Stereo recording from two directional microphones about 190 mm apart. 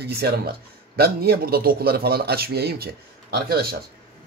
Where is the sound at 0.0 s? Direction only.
55° right (ahead or behind).